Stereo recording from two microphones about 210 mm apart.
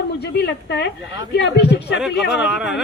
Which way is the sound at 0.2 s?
55° left (ahead or behind).